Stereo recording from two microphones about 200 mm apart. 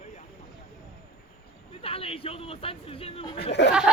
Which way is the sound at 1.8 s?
30° left (ahead or behind).